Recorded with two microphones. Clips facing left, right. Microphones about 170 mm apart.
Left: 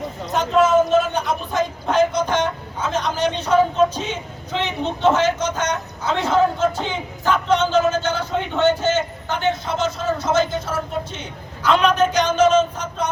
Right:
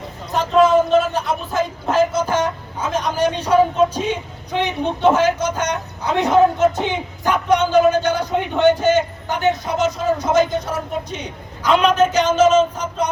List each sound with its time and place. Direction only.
0.3 s speech: centre (ahead or behind)